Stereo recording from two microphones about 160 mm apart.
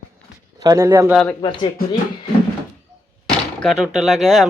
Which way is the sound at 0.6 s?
20° right (ahead or behind).